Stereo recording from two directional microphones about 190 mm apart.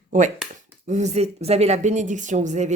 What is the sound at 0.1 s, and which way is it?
Speech, 40° right (ahead or behind).